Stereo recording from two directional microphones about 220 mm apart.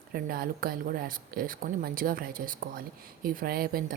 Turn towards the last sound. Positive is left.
turn(degrees=-45)  # may be behind; listen again after turning